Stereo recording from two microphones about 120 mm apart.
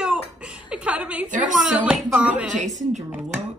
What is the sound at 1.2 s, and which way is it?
Speech, 90° right.